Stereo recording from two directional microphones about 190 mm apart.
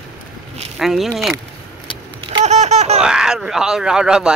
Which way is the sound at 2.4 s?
35° right (ahead or behind).